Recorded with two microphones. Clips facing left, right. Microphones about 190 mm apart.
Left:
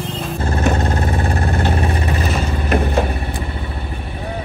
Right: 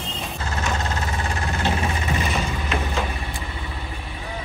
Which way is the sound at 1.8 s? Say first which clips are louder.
Left 5 dB; 35° left (ahead or behind).